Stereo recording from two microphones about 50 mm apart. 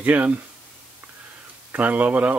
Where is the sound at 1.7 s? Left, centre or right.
Right.